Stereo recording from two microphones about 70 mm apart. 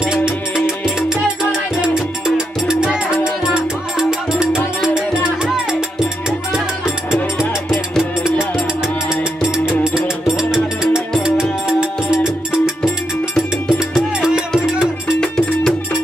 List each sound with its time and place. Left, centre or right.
0.0 s music: centre
8.0 s music: centre
13.3 s music: centre
15.1 s music: centre